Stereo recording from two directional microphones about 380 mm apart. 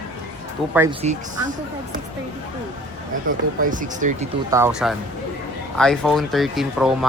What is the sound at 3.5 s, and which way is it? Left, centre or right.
Speech, right.